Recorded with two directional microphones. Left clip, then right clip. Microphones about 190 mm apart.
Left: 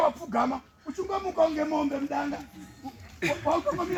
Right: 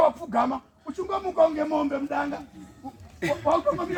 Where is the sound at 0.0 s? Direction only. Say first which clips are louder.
Right 3 dB; 15° right (ahead or behind).